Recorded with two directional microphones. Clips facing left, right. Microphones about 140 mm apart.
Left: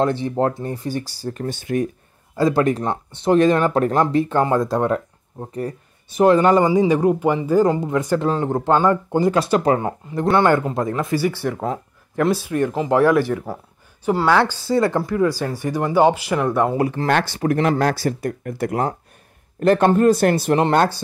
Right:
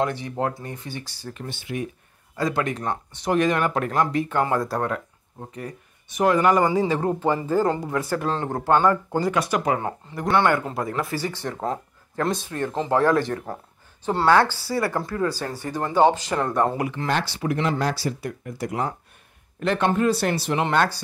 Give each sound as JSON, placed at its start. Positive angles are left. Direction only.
{"t": 0.0, "sound": "speech", "side_deg": 30}
{"t": 2.3, "sound": "speech", "side_deg": 30}
{"t": 4.9, "sound": "speech", "side_deg": 35}
{"t": 11.4, "sound": "speech", "side_deg": 5}
{"t": 14.4, "sound": "speech", "side_deg": 20}
{"t": 16.7, "sound": "speech", "side_deg": 35}
{"t": 17.1, "sound": "speech", "side_deg": 50}